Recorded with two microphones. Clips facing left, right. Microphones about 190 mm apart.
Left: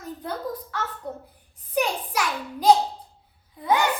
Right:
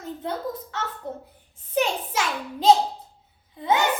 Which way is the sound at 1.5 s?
25° right (ahead or behind).